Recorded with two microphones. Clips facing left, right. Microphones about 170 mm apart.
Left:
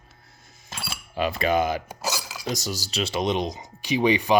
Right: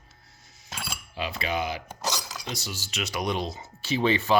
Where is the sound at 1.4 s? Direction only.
50° left (ahead or behind).